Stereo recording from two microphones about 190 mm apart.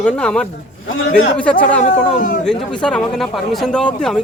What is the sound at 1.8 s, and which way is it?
Speech, 40° left (ahead or behind).